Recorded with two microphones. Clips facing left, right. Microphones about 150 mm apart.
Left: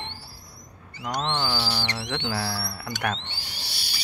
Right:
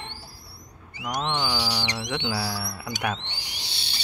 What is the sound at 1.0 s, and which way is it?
Owl, 15° right (ahead or behind).